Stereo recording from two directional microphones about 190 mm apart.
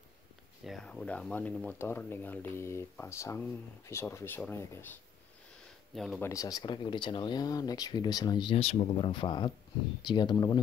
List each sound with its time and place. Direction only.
0.7 s speech: 5° left (ahead or behind)
5.9 s speech: centre (ahead or behind)
6.2 s speech: 20° left (ahead or behind)